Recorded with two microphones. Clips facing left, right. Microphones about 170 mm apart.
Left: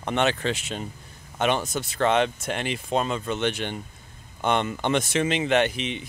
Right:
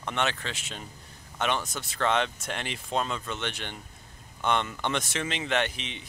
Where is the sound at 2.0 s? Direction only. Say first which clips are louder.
Left 5 dB; 15° left (ahead or behind).